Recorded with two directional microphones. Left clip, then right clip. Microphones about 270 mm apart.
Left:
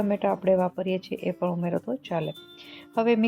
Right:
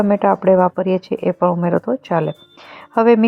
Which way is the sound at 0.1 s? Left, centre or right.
Centre.